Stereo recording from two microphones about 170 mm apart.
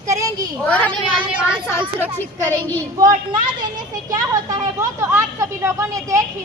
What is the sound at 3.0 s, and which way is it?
A woman's voice, 25° right (ahead or behind).